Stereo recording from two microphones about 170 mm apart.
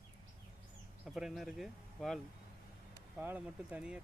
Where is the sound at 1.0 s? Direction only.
Centre (ahead or behind).